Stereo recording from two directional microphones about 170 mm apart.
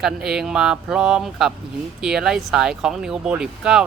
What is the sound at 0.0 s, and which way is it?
Speech, 5° right (ahead or behind).